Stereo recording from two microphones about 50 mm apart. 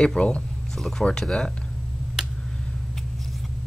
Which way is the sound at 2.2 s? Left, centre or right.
Centre.